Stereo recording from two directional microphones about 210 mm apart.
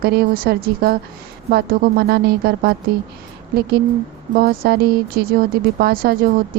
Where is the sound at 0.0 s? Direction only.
45° right (ahead or behind).